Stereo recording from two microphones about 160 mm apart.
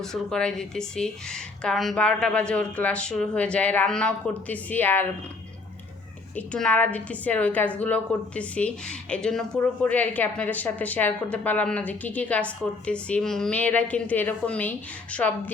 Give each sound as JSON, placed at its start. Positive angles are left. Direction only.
{"t": 0.0, "sound": "speech", "side_deg": 5}
{"t": 6.3, "sound": "a woman's voice", "side_deg": 5}